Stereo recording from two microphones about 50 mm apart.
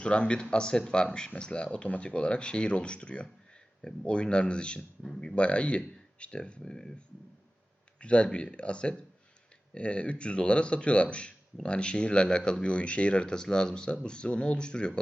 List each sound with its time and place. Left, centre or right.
0.0 s speech: left
12.6 s speech: left